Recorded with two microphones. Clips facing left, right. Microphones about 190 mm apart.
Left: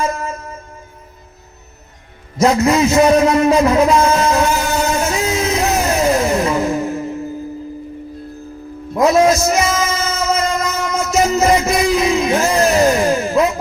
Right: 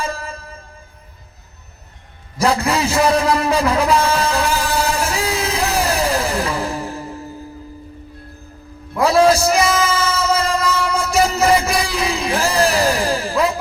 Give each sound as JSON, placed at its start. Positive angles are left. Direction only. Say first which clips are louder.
{"t": 0.0, "sound": "music", "louder": "left 5 dB", "side_deg": -30}
{"t": 2.4, "sound": "a sound", "louder": "left 5 dB", "side_deg": -30}
{"t": 9.0, "sound": "music", "louder": "left 1 dB", "side_deg": -30}